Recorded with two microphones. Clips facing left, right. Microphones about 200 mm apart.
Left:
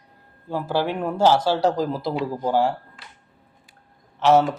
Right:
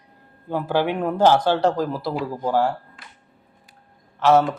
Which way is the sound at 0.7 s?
15° right (ahead or behind).